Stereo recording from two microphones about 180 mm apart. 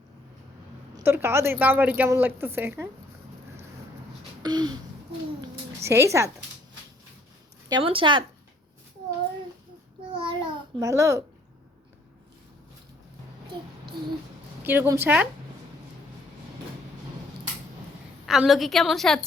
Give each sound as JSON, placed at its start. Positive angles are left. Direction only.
{"t": 0.9, "sound": "a woman's voice", "side_deg": -15}
{"t": 4.4, "sound": "speech", "side_deg": -25}
{"t": 5.8, "sound": "a woman's voice", "side_deg": -15}
{"t": 7.7, "sound": "speech", "side_deg": -30}
{"t": 10.1, "sound": "babbling", "side_deg": -30}
{"t": 14.6, "sound": "a woman's voice", "side_deg": -10}
{"t": 18.3, "sound": "a woman's voice", "side_deg": 0}